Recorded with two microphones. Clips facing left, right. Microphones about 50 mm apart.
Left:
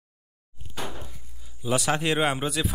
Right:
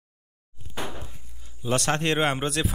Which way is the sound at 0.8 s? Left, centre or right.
Right.